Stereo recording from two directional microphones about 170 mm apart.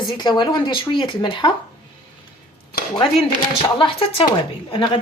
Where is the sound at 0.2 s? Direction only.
25° left (ahead or behind).